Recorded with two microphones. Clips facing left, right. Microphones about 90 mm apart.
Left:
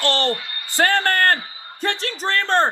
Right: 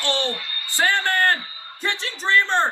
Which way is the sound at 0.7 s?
55° left (ahead or behind).